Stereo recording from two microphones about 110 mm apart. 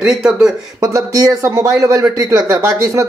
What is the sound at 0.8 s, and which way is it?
Speech, 30° right (ahead or behind).